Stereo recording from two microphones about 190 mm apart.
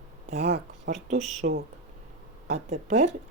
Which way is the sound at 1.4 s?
50° right (ahead or behind).